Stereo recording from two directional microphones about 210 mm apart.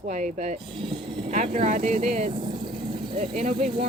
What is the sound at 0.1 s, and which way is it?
Speech, 35° right (ahead or behind).